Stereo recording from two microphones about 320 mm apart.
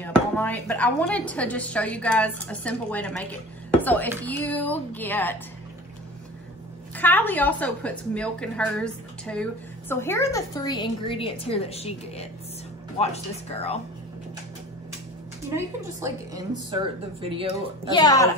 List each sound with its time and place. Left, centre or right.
0.0 s speech: centre
7.0 s a woman's voice: centre
15.5 s a woman's voice: centre
17.9 s a woman's voice: centre